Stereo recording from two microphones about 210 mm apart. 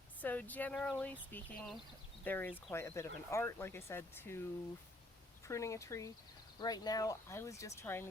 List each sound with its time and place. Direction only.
0.2 s speech: 10° left (ahead or behind)
5.5 s speech: 15° left (ahead or behind)